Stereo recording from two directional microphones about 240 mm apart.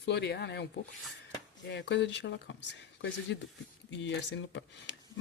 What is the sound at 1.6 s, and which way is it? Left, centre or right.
Speech, left.